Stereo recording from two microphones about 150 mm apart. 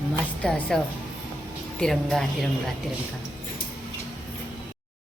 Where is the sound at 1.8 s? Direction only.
Centre (ahead or behind).